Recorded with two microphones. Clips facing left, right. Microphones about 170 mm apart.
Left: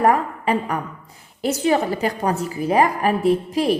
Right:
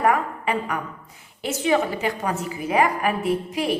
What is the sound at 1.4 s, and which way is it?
A woman's voice, 40° left (ahead or behind).